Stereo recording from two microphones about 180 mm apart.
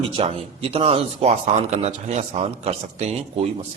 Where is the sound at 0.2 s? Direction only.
30° right (ahead or behind).